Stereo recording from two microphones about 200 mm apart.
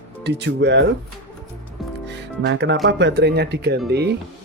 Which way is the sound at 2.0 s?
60° right (ahead or behind).